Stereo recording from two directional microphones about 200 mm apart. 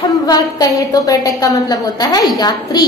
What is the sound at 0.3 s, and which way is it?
A woman's voice, 20° left (ahead or behind).